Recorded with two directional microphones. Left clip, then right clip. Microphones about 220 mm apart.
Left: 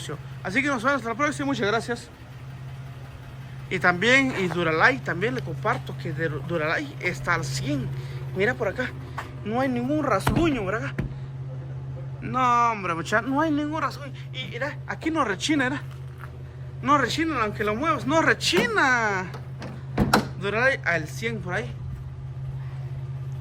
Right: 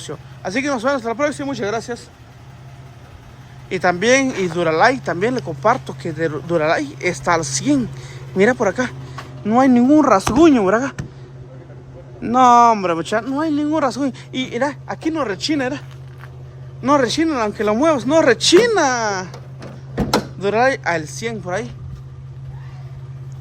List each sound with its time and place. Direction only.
0.0 s speech: 15° right (ahead or behind)
3.7 s speech: 15° right (ahead or behind)
12.2 s speech: 20° right (ahead or behind)
16.8 s speech: 15° right (ahead or behind)
20.4 s speech: 20° right (ahead or behind)